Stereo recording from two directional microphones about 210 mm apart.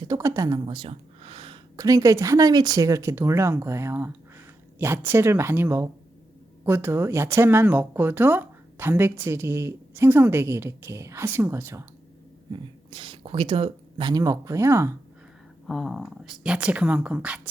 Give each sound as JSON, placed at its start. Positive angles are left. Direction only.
{"t": 0.0, "sound": "speech", "side_deg": -15}
{"t": 12.5, "sound": "speech", "side_deg": -25}
{"t": 15.6, "sound": "speech", "side_deg": 0}